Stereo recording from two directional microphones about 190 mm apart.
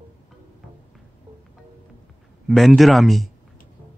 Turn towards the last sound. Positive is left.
turn(degrees=0)  # may be behind; listen again after turning